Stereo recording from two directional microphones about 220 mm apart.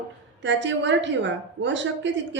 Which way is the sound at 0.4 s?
55° right (ahead or behind).